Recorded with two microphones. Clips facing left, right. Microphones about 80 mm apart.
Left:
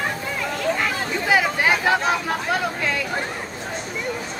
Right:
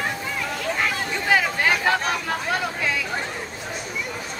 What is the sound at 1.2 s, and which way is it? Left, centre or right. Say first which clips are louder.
Chatter: left 1 dB; centre.